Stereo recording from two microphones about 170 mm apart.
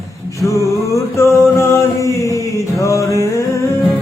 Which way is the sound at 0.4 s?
20° left (ahead or behind).